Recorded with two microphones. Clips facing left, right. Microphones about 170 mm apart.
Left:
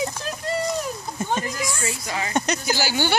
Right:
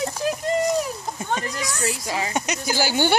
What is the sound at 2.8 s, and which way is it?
Speech, 50° right (ahead or behind).